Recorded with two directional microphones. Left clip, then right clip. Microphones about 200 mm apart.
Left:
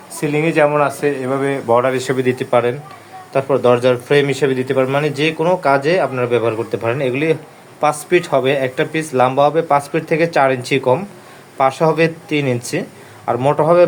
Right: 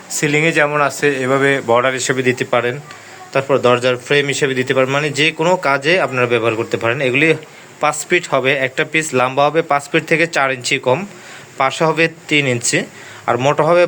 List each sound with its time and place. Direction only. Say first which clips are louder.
0.1 s a man's voice: right 2 dB; 5° right (ahead or behind)